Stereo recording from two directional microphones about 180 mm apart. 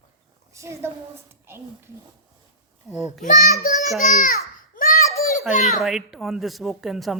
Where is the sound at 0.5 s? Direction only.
15° right (ahead or behind).